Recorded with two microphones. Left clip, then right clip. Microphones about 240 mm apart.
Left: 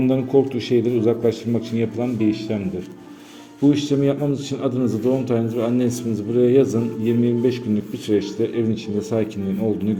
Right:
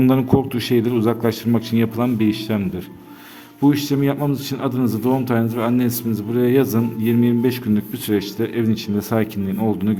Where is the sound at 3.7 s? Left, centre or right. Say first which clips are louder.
Left 1 dB; right.